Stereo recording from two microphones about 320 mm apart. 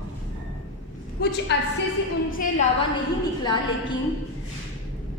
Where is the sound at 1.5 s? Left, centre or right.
Left.